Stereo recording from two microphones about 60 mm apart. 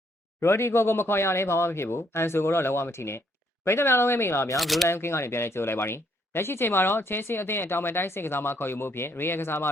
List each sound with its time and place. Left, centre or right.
0.3 s speech: left
4.5 s speech: centre
4.9 s speech: left